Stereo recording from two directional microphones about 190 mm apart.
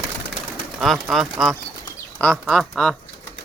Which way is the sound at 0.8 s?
Centre (ahead or behind).